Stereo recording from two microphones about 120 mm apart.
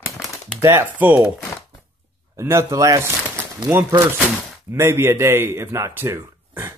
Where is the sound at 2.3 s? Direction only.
25° right (ahead or behind).